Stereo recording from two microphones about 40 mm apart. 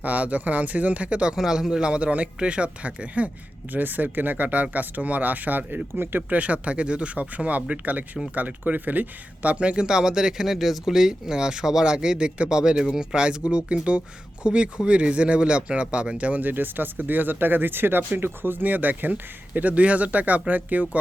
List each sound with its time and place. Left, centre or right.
0.0 s speech: right
1.4 s speech: centre
1.8 s speech: right
3.7 s speech: right
5.9 s speech: right
6.3 s speech: right
9.8 s speech: centre
13.1 s speech: right
16.4 s speech: right
19.7 s speech: right